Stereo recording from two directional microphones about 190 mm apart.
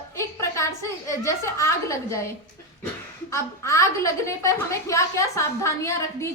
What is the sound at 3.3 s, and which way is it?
A woman's voice, 15° left (ahead or behind).